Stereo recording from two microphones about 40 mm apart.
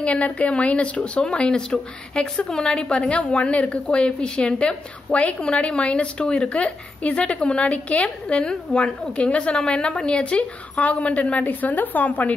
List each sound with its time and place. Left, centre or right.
0.0 s a woman's voice: left